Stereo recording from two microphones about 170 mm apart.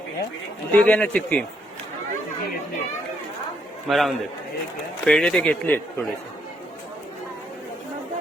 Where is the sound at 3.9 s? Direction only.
Centre (ahead or behind).